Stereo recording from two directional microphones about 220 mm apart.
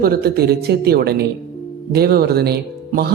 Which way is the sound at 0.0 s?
45° right (ahead or behind).